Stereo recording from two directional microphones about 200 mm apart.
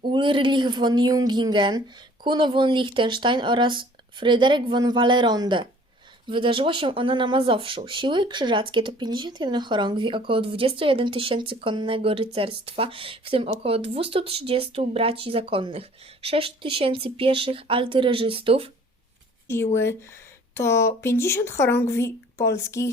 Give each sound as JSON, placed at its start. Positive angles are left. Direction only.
{"t": 0.0, "sound": "speech", "side_deg": -25}
{"t": 19.5, "sound": "speech", "side_deg": 15}